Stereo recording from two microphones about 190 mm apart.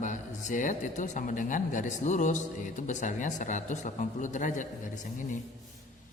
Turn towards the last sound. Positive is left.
turn(degrees=40)  # may be behind; listen again after turning